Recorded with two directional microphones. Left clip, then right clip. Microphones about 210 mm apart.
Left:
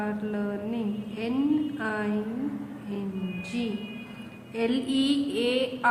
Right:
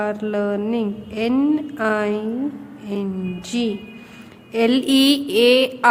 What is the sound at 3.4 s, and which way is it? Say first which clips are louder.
A woman's voice: right 10 dB; 50° right (ahead or behind).